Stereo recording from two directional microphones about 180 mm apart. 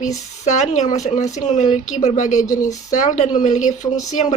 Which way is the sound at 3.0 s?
45° left (ahead or behind).